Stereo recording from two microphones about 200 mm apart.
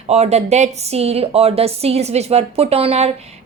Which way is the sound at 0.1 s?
35° right (ahead or behind).